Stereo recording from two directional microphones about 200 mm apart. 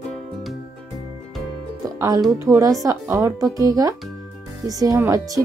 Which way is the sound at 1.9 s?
15° right (ahead or behind).